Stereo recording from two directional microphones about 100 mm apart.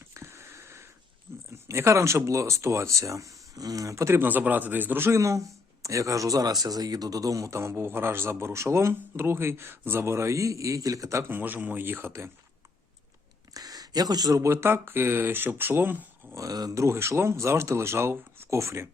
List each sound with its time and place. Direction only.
0.1 s a sound: 25° right (ahead or behind)
1.6 s speech: 30° right (ahead or behind)
13.5 s speech: 40° right (ahead or behind); by 16.4 s 20° right (ahead or behind)
16.4 s speech: 40° right (ahead or behind)